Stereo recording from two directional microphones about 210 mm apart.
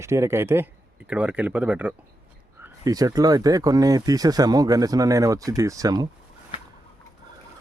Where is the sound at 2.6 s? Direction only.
15° right (ahead or behind).